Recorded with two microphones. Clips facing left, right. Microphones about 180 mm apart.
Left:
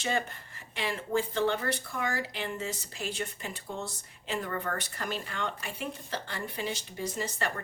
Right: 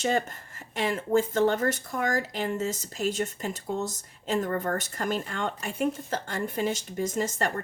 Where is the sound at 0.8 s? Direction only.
45° right (ahead or behind).